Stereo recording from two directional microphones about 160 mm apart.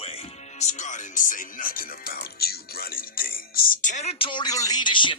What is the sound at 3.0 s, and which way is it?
Music, 65° left (ahead or behind).